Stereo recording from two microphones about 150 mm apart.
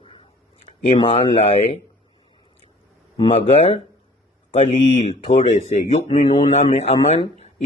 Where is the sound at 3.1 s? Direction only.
40° left (ahead or behind).